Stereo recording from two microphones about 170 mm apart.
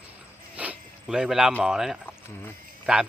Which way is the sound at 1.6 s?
Centre (ahead or behind).